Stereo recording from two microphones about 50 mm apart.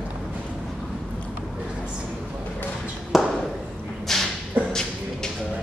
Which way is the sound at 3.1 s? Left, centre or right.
Centre.